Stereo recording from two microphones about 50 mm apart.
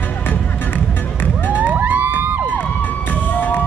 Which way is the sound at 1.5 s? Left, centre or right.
Right.